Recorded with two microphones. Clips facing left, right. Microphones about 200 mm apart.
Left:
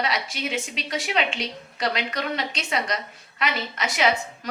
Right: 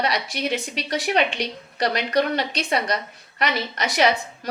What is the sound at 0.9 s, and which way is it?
Speech, 35° right (ahead or behind).